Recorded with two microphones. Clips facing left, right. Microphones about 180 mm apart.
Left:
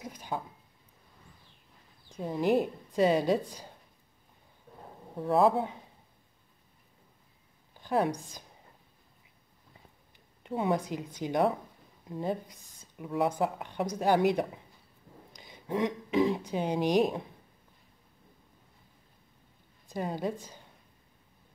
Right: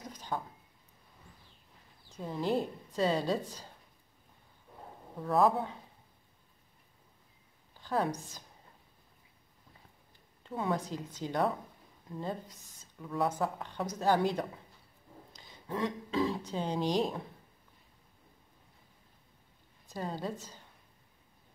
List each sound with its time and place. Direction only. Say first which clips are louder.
0.0 s a sound: left 2 dB; 10° left (ahead or behind)
2.1 s a woman's voice: left 5 dB; 15° left (ahead or behind)
5.2 s speech: left 3 dB; 30° left (ahead or behind)
7.8 s a woman's voice: left 4 dB; 15° left (ahead or behind)
10.4 s a woman's voice: left 4 dB; 15° left (ahead or behind)
19.9 s a woman's voice: left 4 dB; 15° left (ahead or behind)